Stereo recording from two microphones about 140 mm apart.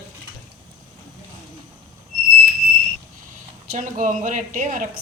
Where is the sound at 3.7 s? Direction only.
70° right (ahead or behind).